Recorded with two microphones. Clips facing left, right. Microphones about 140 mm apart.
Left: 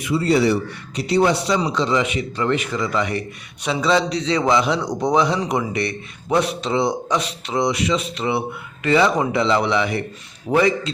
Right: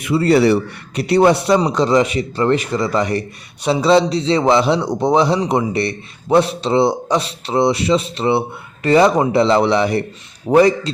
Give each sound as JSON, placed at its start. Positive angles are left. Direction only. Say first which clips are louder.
{"t": 0.0, "sound": "a man's voice", "louder": "right 4 dB", "side_deg": -65}
{"t": 1.5, "sound": "a man's voice", "louder": "right 6 dB", "side_deg": -40}